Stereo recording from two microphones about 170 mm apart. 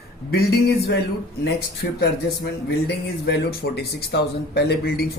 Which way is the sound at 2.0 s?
70° left (ahead or behind).